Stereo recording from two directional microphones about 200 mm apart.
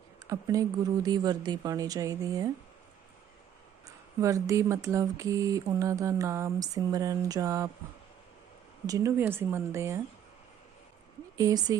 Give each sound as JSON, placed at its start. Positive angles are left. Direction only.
{"t": 0.3, "sound": "speech", "side_deg": -15}
{"t": 3.8, "sound": "speech", "side_deg": -15}
{"t": 8.9, "sound": "speech", "side_deg": -15}
{"t": 11.3, "sound": "speech", "side_deg": -15}